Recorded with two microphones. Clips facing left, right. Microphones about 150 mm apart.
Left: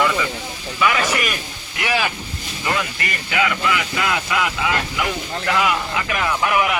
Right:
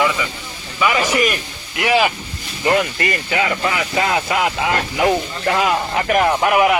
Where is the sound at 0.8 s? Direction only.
5° right (ahead or behind).